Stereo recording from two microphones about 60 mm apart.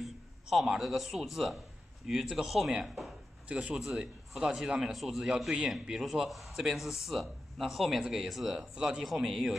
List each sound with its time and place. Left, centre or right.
0.0 s a man's voice: centre
3.4 s a man's voice: right